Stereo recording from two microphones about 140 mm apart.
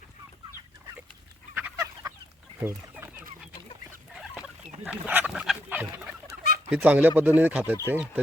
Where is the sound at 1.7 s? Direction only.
25° right (ahead or behind).